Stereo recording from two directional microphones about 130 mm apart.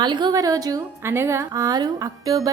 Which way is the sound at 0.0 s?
35° right (ahead or behind).